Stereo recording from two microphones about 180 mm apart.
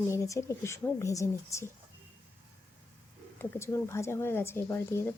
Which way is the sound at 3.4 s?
15° left (ahead or behind).